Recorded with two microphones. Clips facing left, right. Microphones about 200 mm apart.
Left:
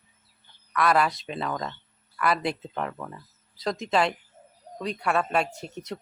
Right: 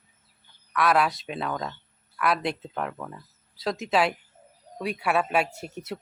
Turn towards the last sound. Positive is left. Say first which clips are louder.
# even
turn(degrees=-5)  # may be behind; listen again after turning